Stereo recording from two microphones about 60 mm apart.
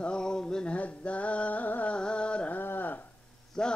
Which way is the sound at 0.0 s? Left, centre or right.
Centre.